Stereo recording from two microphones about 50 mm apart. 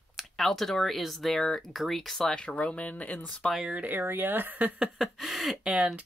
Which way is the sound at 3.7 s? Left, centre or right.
Right.